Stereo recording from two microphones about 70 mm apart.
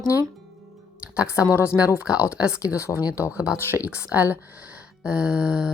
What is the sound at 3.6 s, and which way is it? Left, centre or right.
Speech, right.